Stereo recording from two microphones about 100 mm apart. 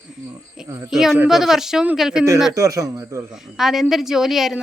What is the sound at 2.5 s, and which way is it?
Speech, 35° right (ahead or behind).